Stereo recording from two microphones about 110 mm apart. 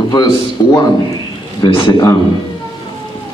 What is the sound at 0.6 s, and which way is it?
A man's voice, 35° left (ahead or behind).